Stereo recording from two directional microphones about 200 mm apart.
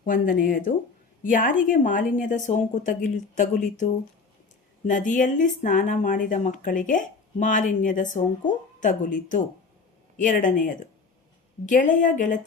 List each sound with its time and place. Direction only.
0.0 s speech: 45° left (ahead or behind)